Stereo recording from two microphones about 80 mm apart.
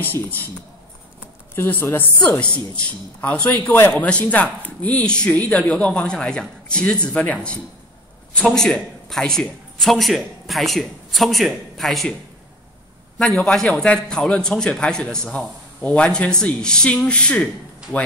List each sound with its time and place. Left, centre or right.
0.0 s a woman's voice: left
1.5 s a woman's voice: left
2.4 s speech: centre
8.5 s a man's voice: centre
13.2 s a man's voice: centre